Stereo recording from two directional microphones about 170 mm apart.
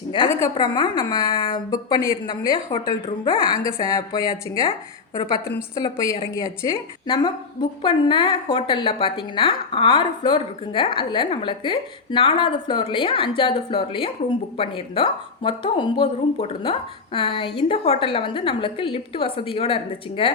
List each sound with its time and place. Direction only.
0.1 s a woman's voice: 20° left (ahead or behind)